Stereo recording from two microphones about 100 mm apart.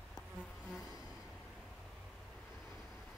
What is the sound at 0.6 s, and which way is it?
Insect, 5° right (ahead or behind).